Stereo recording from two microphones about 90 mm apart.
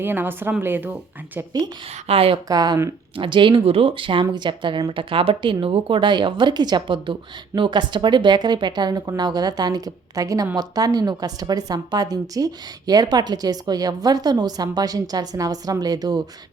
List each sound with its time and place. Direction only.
0.0 s a woman's voice: 20° right (ahead or behind)
2.0 s a woman's voice: 90° right
2.5 s speech: 45° right (ahead or behind)
3.2 s speech: 65° right (ahead or behind); by 16.2 s 50° right (ahead or behind)